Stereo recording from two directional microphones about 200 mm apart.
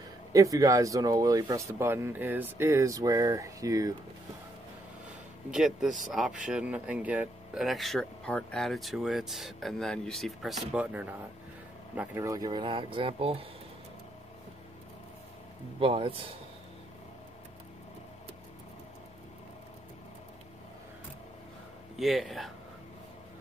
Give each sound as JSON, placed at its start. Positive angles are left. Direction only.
{"t": 0.3, "sound": "speech", "side_deg": -15}
{"t": 5.5, "sound": "speech", "side_deg": -5}
{"t": 15.8, "sound": "speech", "side_deg": -25}
{"t": 21.9, "sound": "speech", "side_deg": 0}